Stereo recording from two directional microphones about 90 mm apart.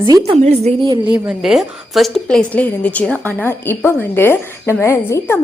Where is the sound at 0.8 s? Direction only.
60° right (ahead or behind).